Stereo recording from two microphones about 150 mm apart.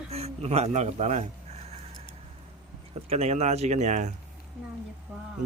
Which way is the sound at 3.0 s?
45° right (ahead or behind).